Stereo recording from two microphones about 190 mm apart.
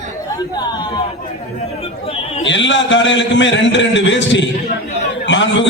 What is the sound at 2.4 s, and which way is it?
A man's voice, 75° left (ahead or behind).